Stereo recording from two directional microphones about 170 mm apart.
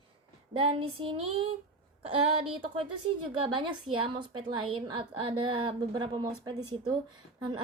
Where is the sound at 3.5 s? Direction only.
30° right (ahead or behind).